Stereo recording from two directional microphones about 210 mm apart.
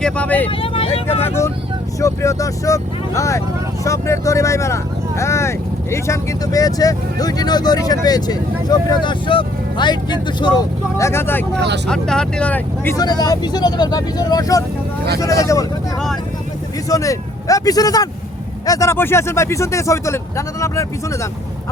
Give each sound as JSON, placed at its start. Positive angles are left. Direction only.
{"t": 0.0, "sound": "speech", "side_deg": 5}
{"t": 0.6, "sound": "speech", "side_deg": 25}
{"t": 1.2, "sound": "speech", "side_deg": 10}
{"t": 11.5, "sound": "speech", "side_deg": -55}
{"t": 11.9, "sound": "speech", "side_deg": 5}
{"t": 16.9, "sound": "speech", "side_deg": 15}